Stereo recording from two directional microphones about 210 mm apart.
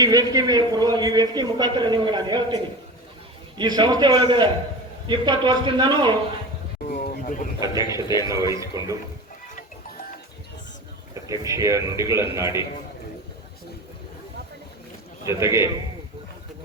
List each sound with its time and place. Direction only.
0.0 s a man's voice: 15° right (ahead or behind)
3.6 s a man's voice: 20° right (ahead or behind)
6.9 s a sound: 40° left (ahead or behind)
7.7 s speech: 20° left (ahead or behind)
8.2 s a man's voice: 15° right (ahead or behind)
11.1 s a man's voice: 15° right (ahead or behind)
15.3 s a man's voice: 15° right (ahead or behind)